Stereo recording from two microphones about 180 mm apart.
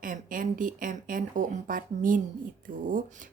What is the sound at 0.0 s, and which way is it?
Speech, 50° right (ahead or behind).